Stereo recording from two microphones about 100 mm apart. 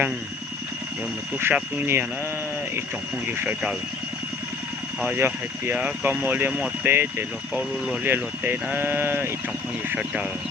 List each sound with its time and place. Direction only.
1.4 s speech: 20° right (ahead or behind)
3.2 s speech: 20° right (ahead or behind)
5.1 s speech: 20° right (ahead or behind)